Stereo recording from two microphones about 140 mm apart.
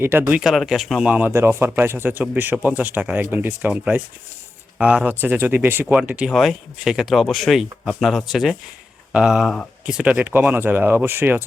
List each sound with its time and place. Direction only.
0.0 s speech: 15° right (ahead or behind)
0.4 s speech: centre (ahead or behind); by 11.4 s 15° right (ahead or behind)